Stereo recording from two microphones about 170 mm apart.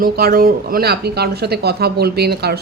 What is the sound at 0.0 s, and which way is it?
Speech, 60° right (ahead or behind).